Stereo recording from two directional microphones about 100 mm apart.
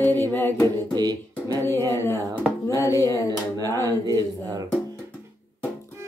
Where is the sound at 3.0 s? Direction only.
30° left (ahead or behind).